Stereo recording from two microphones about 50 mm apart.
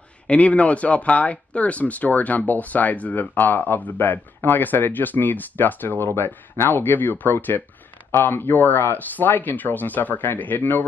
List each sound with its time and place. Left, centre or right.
0.3 s speech: left